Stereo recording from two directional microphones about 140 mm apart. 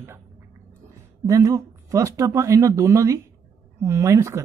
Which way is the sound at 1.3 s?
20° right (ahead or behind).